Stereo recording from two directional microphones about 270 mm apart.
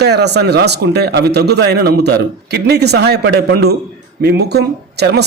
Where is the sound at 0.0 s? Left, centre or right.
Right.